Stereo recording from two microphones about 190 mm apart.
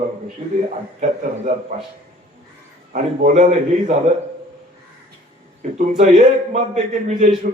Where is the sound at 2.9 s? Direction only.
45° right (ahead or behind).